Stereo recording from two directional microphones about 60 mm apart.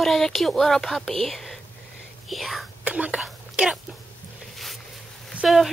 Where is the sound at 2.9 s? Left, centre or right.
Right.